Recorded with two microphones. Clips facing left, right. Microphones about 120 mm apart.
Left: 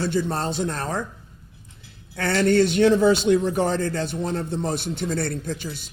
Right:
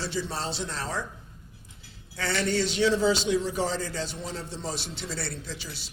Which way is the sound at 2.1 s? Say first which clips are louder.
Left 8 dB; 55° left (ahead or behind).